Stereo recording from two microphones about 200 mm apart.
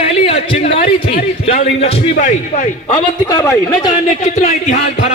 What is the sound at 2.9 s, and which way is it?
A man's voice, 20° left (ahead or behind).